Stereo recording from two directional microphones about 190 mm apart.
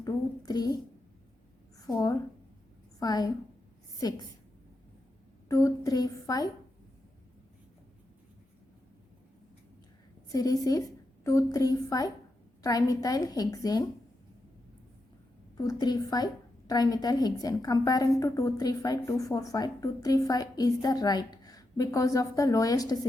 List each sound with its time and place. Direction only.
0.0 s a woman's voice: 20° left (ahead or behind)
1.9 s a woman's voice: 20° left (ahead or behind)
5.5 s a woman's voice: 15° left (ahead or behind)
10.2 s a woman's voice: 20° left (ahead or behind)
15.5 s a woman's voice: 20° left (ahead or behind)